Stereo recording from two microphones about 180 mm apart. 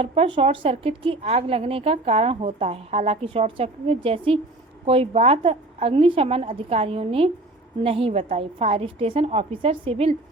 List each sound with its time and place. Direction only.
0.0 s a woman's voice: 35° right (ahead or behind)